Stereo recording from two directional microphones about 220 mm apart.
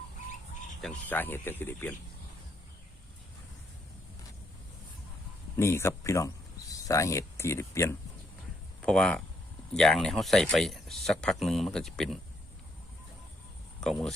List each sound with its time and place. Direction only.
0.8 s speech: 5° left (ahead or behind)
5.5 s speech: 10° left (ahead or behind)
13.8 s speech: centre (ahead or behind)